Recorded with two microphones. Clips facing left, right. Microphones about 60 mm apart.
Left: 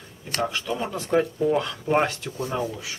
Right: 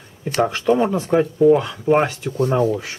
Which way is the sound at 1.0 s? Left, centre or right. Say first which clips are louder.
Right 7 dB; centre.